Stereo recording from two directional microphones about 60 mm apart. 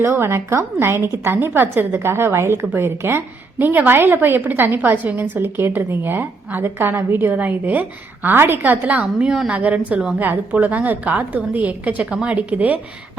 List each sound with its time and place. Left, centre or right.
0.0 s a woman's voice: right